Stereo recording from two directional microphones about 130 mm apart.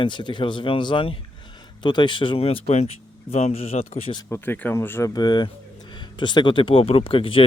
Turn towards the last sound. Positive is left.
turn(degrees=45)  # may be behind; listen again after turning